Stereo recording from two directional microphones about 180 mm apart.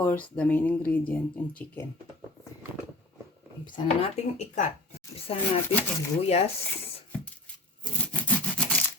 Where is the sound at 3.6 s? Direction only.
25° left (ahead or behind).